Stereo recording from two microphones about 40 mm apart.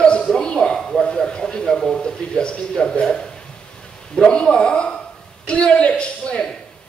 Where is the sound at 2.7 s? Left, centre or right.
Centre.